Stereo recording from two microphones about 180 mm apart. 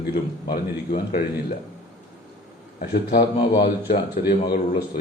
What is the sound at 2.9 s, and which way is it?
A man's voice, 60° left (ahead or behind).